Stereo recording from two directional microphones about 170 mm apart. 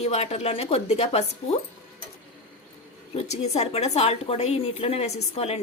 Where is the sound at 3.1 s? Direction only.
40° left (ahead or behind).